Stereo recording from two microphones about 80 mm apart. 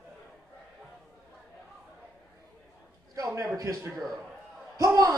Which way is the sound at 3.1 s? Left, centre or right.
Right.